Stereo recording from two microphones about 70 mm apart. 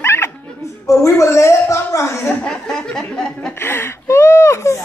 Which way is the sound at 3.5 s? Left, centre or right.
Left.